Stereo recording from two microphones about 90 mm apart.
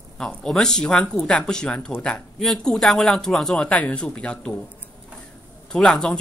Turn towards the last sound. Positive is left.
turn(degrees=5)  # may be behind; listen again after turning